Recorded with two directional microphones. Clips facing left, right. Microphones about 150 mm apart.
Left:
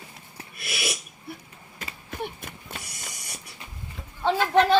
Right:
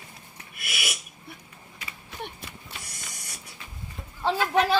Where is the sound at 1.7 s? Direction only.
45° left (ahead or behind).